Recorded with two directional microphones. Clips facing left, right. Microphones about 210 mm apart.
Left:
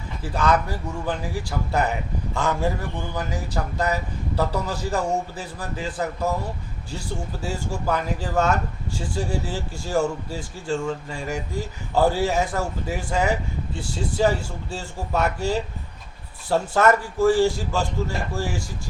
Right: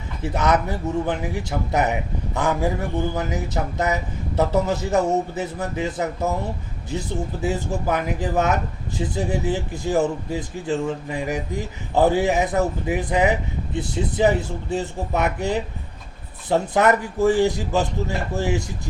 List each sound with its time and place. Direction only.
0.2 s speech: 20° right (ahead or behind)
7.4 s speech: 20° right (ahead or behind)